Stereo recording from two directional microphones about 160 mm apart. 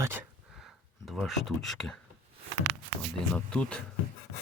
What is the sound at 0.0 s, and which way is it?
Speech, 15° right (ahead or behind).